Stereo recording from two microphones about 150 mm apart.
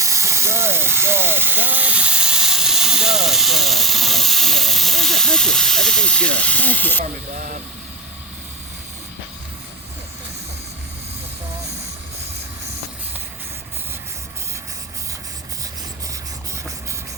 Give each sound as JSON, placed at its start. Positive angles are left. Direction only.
{"t": 0.0, "sound": "speech", "side_deg": -20}
{"t": 7.0, "sound": "speech", "side_deg": -60}